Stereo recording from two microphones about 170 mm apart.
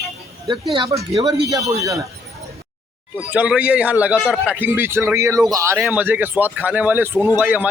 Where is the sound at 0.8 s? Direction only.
20° right (ahead or behind).